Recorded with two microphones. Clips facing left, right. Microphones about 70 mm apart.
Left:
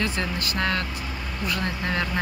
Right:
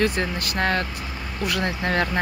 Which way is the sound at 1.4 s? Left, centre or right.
Right.